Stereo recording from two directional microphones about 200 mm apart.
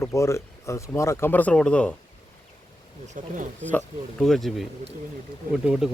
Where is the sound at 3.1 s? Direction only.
40° right (ahead or behind).